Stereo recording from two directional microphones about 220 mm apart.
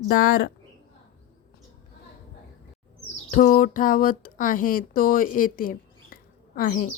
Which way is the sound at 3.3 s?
35° left (ahead or behind).